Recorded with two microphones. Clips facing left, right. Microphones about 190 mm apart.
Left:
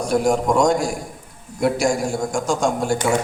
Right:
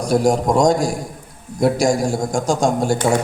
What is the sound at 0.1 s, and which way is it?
A man's voice, 35° right (ahead or behind).